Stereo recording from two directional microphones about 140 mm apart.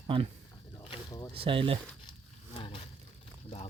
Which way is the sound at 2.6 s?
40° left (ahead or behind).